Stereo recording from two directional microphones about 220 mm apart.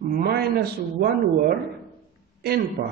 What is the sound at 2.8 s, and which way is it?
Speech, 50° right (ahead or behind).